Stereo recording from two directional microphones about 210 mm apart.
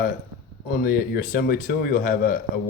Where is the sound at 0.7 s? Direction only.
45° left (ahead or behind).